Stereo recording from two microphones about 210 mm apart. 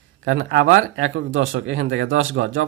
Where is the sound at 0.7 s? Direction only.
45° right (ahead or behind).